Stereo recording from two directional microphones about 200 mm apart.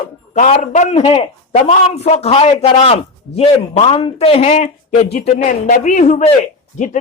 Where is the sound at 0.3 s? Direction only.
35° left (ahead or behind).